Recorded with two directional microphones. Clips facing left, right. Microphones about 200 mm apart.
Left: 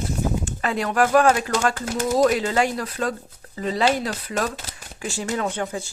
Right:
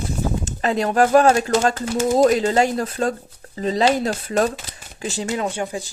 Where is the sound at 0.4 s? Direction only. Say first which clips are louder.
Right 4 dB; 25° right (ahead or behind).